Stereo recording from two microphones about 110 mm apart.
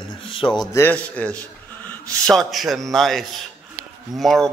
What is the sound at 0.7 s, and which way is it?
Speech, 15° left (ahead or behind).